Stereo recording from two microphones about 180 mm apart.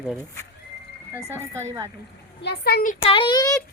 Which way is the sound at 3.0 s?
30° left (ahead or behind).